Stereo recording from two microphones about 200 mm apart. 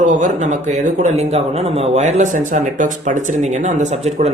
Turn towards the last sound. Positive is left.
turn(degrees=-35)  # may be behind; listen again after turning